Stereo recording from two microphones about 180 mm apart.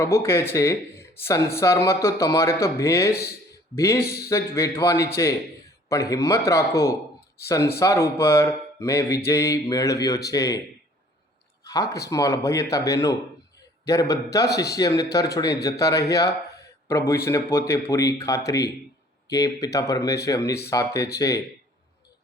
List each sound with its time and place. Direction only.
0.0 s speech: 15° left (ahead or behind)
4.0 s speech: 60° left (ahead or behind)
4.3 s speech: 15° left (ahead or behind)
11.7 s speech: 20° left (ahead or behind)